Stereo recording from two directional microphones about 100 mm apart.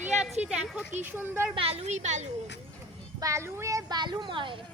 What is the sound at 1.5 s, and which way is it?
Speech, 80° right.